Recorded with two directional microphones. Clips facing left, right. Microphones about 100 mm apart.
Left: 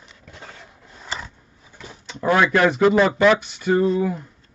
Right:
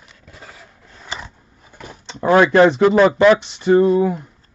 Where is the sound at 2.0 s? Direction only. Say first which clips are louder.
Right 5 dB; 25° right (ahead or behind).